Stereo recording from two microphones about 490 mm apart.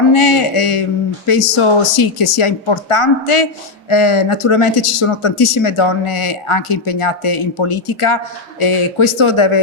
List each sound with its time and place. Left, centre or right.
0.1 s a man's voice: left